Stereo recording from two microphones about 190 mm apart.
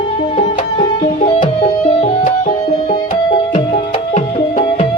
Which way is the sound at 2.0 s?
45° left (ahead or behind).